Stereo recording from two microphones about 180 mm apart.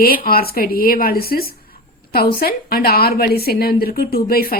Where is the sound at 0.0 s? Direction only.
55° left (ahead or behind).